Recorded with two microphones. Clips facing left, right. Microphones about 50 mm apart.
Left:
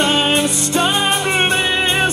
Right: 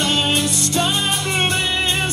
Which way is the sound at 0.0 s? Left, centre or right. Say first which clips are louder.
Left 4 dB; left.